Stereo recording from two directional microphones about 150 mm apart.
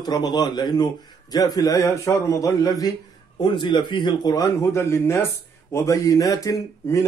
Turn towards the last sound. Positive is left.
turn(degrees=20)  # may be behind; listen again after turning